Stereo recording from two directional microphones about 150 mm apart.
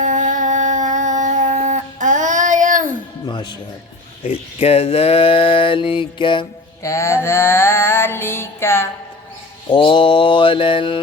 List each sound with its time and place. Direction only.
0.0 s a sound: 60° right (ahead or behind)
3.2 s music: 30° left (ahead or behind)
4.2 s speech: 40° left (ahead or behind)
6.8 s mantra: 20° left (ahead or behind)
9.6 s speech: 35° left (ahead or behind)